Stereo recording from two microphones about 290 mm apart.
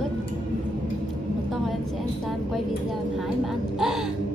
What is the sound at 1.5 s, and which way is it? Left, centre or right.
A woman's voice, centre.